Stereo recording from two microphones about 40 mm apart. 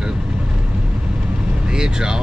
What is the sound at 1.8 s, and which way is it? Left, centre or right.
Speech, centre.